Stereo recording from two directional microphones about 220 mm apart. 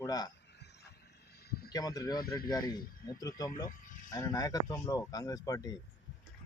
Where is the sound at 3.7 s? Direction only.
35° left (ahead or behind).